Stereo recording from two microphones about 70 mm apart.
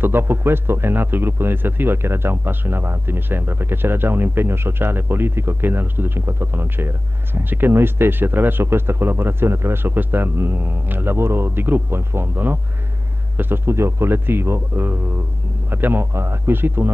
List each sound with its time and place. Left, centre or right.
0.0 s speech: right